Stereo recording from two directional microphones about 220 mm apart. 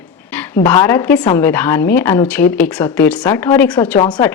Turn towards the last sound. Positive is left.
turn(degrees=20)  # may be behind; listen again after turning